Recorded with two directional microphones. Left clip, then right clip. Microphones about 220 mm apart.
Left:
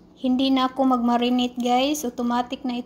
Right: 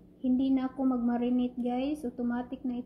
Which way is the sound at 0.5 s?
40° left (ahead or behind).